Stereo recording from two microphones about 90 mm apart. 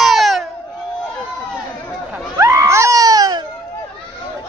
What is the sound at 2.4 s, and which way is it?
Baby cry, 35° right (ahead or behind).